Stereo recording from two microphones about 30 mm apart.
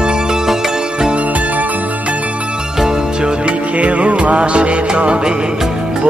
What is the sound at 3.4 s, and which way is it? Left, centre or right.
Music, right.